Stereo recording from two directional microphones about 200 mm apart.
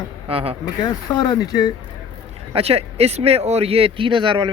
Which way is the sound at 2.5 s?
30° right (ahead or behind).